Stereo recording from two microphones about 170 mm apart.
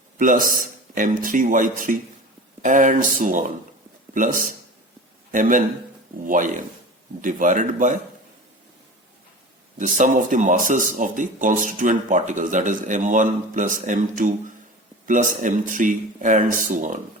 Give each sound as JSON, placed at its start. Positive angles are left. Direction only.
{"t": 0.2, "sound": "speech", "side_deg": -55}
{"t": 9.7, "sound": "speech", "side_deg": -50}